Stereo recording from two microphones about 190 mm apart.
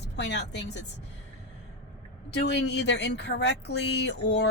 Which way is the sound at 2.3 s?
65° left (ahead or behind).